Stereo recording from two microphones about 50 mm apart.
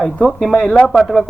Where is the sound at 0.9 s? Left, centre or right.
Centre.